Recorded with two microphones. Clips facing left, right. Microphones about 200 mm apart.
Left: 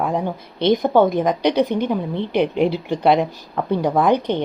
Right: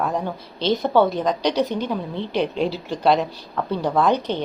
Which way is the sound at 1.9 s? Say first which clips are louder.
Left 4 dB; 15° left (ahead or behind).